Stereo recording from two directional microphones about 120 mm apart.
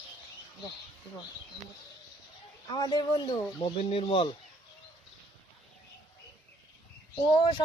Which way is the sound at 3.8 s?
55° left (ahead or behind).